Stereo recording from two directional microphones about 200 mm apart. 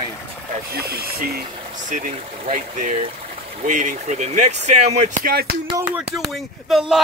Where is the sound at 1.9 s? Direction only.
40° right (ahead or behind).